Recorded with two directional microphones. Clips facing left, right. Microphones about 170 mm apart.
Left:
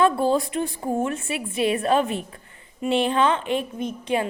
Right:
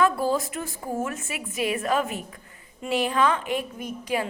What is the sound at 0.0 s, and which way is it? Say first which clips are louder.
A child's voice: left 3 dB; 25° left (ahead or behind).